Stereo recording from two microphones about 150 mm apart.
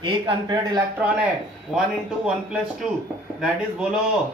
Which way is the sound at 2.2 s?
5° right (ahead or behind).